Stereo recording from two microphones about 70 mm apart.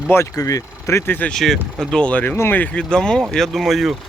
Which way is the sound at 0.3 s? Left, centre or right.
Left.